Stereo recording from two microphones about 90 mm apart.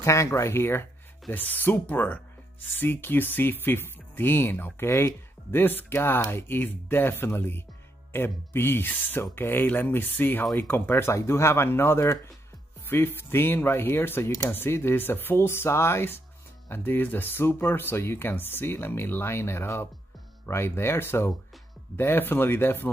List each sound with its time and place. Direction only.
0.0 s speech: 35° left (ahead or behind)